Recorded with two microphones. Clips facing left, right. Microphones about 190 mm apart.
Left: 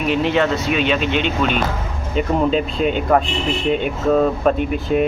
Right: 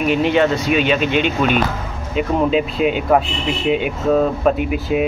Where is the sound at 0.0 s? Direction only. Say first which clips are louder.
Right 2 dB; 5° right (ahead or behind).